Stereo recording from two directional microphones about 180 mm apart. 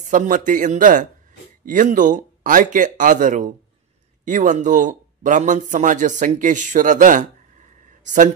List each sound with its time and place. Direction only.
0.1 s a man's voice: 45° right (ahead or behind)